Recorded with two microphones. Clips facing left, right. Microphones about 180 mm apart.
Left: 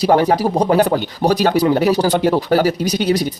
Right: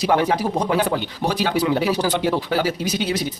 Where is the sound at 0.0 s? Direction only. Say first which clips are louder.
Left 5 dB; 40° left (ahead or behind).